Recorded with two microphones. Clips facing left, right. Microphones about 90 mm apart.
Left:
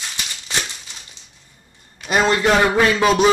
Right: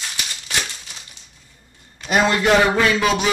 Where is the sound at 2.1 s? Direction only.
30° left (ahead or behind).